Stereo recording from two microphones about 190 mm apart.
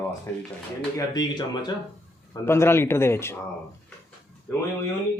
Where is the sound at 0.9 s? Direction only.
20° left (ahead or behind).